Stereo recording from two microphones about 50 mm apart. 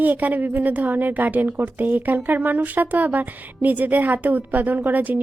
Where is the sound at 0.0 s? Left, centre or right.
Right.